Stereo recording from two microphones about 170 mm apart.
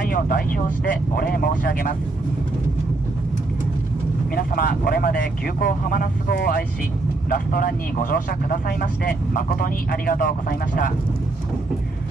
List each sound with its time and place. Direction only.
0.0 s speech: 55° left (ahead or behind)
4.4 s speech: 60° left (ahead or behind)